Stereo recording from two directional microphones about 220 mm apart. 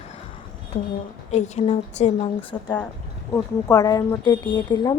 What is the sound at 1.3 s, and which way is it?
A woman's voice, 30° left (ahead or behind).